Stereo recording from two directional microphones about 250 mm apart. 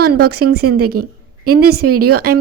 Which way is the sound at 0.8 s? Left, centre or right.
Right.